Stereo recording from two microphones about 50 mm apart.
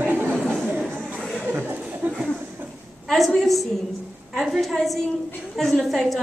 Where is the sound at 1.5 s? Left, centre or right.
Right.